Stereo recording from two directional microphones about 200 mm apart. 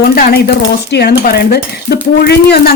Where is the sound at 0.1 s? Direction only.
50° left (ahead or behind).